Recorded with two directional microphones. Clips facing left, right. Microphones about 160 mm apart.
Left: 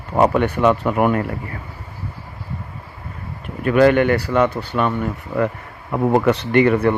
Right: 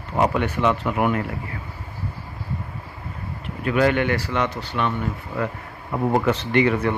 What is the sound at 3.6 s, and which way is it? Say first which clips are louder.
Speech: left 6 dB; 55° left (ahead or behind).